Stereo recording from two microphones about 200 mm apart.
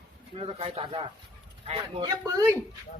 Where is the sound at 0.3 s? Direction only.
30° right (ahead or behind).